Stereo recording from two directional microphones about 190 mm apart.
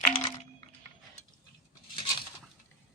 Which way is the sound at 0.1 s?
30° left (ahead or behind).